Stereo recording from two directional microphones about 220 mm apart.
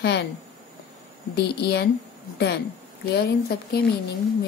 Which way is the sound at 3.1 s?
45° left (ahead or behind).